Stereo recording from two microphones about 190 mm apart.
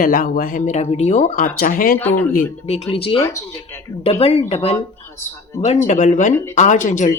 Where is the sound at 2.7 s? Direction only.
30° left (ahead or behind).